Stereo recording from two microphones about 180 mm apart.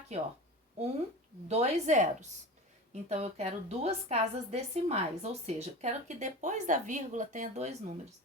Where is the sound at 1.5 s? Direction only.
35° right (ahead or behind).